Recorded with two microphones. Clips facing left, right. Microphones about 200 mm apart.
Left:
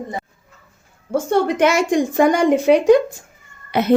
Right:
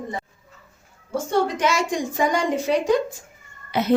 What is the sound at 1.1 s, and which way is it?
Speech, 60° left (ahead or behind).